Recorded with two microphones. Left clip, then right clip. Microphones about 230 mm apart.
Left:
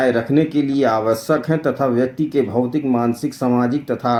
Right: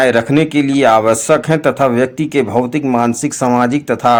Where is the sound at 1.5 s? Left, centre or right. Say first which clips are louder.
Right 6 dB; centre.